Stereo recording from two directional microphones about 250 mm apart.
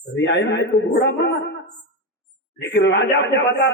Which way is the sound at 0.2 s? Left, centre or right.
Left.